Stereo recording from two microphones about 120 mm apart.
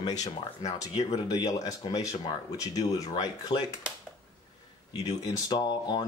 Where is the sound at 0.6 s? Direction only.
30° left (ahead or behind).